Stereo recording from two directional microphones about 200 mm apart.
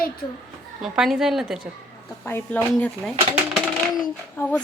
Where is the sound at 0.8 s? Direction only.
Centre (ahead or behind).